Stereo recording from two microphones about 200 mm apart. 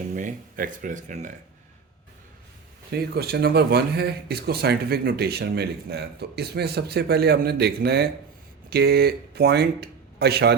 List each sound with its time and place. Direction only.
0.1 s speech: 40° right (ahead or behind)
2.9 s speech: 50° right (ahead or behind)